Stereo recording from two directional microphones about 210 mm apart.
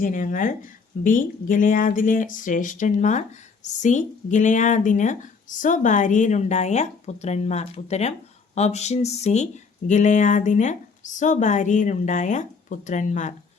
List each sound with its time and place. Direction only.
0.0 s speech: 40° left (ahead or behind)